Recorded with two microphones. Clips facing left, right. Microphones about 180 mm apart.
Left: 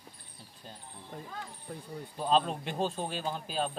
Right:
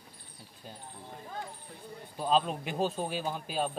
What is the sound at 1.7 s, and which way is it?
Speech, 50° left (ahead or behind).